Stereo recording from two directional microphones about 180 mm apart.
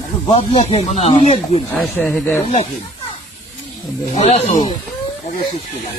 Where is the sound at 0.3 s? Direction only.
30° left (ahead or behind).